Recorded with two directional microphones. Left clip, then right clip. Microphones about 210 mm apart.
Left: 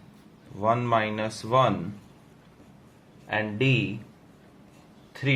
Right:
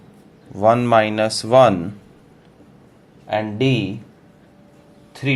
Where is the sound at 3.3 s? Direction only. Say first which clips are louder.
Right 6 dB; 20° right (ahead or behind).